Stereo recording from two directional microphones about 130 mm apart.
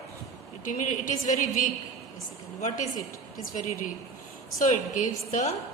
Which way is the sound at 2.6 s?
70° left (ahead or behind).